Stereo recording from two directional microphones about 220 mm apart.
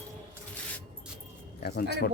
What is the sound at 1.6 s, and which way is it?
Speech, 45° left (ahead or behind).